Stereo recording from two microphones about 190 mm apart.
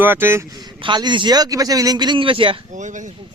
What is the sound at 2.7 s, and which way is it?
Speech, 40° right (ahead or behind).